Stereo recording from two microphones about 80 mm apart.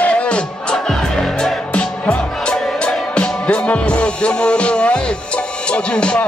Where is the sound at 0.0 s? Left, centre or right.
Centre.